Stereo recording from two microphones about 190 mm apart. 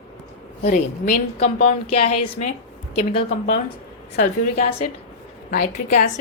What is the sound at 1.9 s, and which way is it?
Speech, 30° left (ahead or behind).